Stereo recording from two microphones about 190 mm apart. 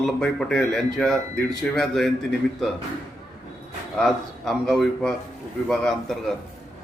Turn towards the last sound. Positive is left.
turn(degrees=5)  # may be behind; listen again after turning